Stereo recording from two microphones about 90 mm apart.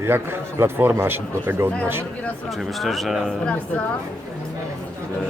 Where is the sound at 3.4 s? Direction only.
10° left (ahead or behind).